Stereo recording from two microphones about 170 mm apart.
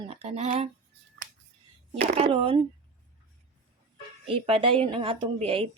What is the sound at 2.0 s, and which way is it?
Speech, 35° right (ahead or behind).